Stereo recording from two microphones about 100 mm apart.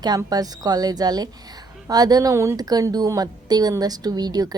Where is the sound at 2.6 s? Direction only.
40° right (ahead or behind).